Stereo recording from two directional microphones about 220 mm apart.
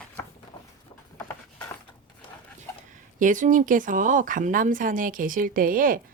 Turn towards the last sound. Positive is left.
turn(degrees=-40)  # may be behind; listen again after turning